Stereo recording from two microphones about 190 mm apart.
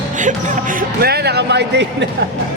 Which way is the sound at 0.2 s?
40° right (ahead or behind).